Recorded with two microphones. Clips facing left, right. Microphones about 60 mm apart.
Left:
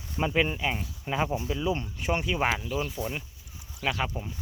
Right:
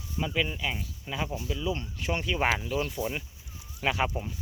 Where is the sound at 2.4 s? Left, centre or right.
Centre.